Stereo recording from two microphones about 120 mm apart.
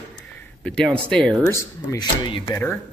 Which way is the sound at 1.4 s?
25° left (ahead or behind).